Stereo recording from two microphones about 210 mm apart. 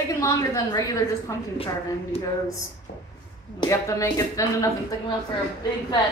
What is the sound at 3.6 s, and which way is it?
A woman's voice, 15° left (ahead or behind).